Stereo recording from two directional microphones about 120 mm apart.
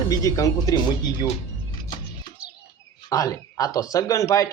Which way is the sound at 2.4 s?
10° right (ahead or behind).